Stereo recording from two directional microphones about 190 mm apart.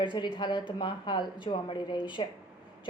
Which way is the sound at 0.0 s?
25° left (ahead or behind).